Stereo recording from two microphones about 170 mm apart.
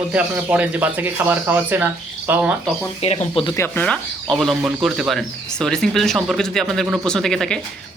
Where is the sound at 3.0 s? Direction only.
35° left (ahead or behind).